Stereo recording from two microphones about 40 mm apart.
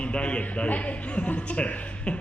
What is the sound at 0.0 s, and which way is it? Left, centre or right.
A man's voice, left.